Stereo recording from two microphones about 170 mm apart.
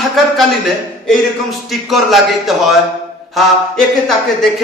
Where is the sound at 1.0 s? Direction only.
Centre (ahead or behind).